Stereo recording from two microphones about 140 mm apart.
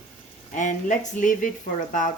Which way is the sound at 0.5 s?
65° left (ahead or behind).